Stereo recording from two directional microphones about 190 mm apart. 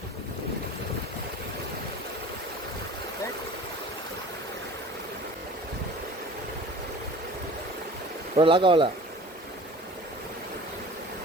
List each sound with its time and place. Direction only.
8.4 s speech: 25° right (ahead or behind)